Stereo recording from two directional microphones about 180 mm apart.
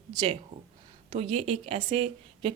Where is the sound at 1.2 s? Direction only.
30° right (ahead or behind).